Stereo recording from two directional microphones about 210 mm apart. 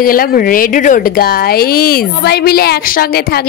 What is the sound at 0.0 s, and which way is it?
Speech, 45° left (ahead or behind).